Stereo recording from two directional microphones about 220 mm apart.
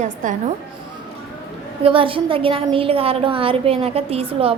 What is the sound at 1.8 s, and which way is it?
A woman's voice, 25° right (ahead or behind).